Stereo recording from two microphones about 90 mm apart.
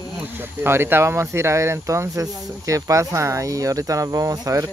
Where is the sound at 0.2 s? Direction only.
20° right (ahead or behind).